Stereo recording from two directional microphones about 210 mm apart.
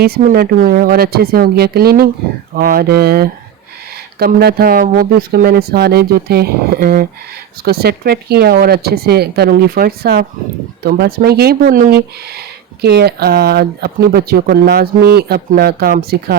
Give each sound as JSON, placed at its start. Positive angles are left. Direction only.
{"t": 0.0, "sound": "speech", "side_deg": -45}